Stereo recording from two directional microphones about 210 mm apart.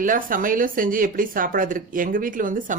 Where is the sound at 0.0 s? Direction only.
40° right (ahead or behind).